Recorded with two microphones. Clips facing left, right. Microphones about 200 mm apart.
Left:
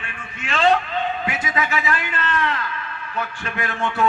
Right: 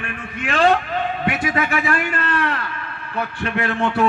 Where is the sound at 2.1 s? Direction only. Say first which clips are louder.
Right 2 dB; 40° right (ahead or behind).